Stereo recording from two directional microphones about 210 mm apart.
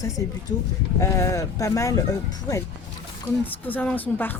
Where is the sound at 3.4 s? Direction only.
10° left (ahead or behind).